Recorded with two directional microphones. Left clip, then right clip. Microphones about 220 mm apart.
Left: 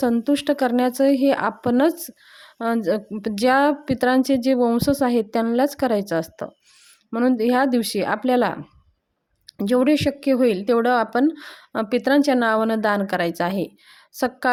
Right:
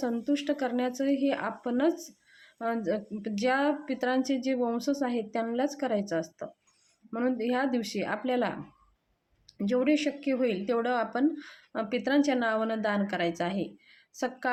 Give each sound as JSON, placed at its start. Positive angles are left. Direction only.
{"t": 0.0, "sound": "speech", "side_deg": 45}